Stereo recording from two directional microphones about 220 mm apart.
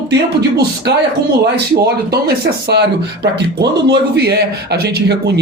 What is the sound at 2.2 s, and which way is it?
Speech, 50° right (ahead or behind).